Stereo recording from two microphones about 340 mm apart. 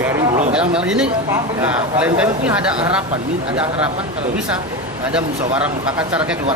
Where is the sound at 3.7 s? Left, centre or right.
Centre.